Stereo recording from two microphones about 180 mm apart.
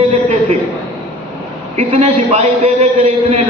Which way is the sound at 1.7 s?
35° right (ahead or behind).